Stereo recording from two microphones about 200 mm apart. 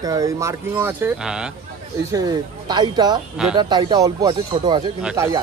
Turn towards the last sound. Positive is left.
turn(degrees=-15)  # may be behind; listen again after turning